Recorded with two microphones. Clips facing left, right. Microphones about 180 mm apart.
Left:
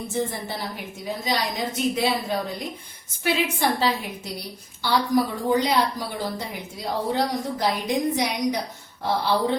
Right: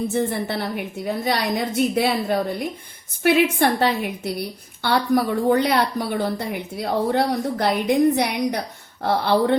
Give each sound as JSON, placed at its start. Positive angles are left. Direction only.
{"t": 0.1, "sound": "a woman's voice", "side_deg": -65}